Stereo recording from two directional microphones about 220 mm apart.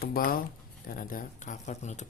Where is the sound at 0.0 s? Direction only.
45° left (ahead or behind).